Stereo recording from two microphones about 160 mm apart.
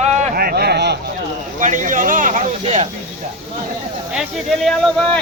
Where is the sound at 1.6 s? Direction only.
50° right (ahead or behind).